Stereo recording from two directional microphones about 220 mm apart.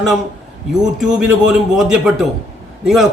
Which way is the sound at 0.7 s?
5° right (ahead or behind).